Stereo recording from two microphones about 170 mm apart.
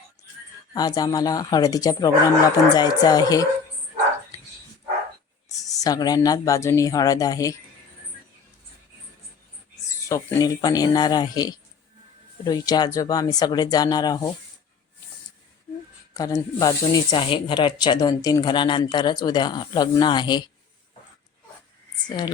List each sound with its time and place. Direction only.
0.2 s a sound: 20° left (ahead or behind)
0.7 s speech: 20° left (ahead or behind)
5.5 s speech: 20° left (ahead or behind)
10.1 s speech: 20° left (ahead or behind)
16.1 s speech: 20° left (ahead or behind)
22.0 s speech: 25° left (ahead or behind)